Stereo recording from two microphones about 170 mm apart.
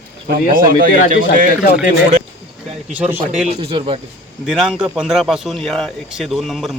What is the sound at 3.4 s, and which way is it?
Speech, 35° right (ahead or behind).